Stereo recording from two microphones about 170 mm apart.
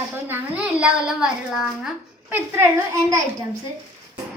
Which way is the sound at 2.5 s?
15° right (ahead or behind).